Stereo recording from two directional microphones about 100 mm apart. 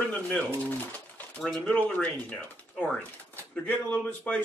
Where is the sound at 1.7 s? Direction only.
15° left (ahead or behind).